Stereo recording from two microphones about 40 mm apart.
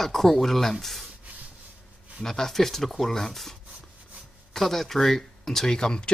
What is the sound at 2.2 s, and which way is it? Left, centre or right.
Speech, centre.